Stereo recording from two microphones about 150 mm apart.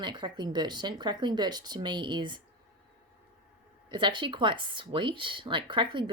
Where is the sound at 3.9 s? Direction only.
30° right (ahead or behind).